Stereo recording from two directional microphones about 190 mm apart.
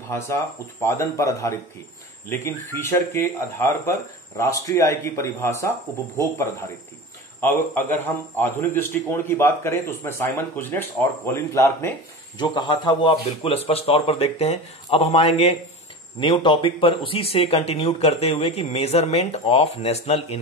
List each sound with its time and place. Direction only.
0.8 s a man's voice: 15° left (ahead or behind); by 20.3 s 35° left (ahead or behind)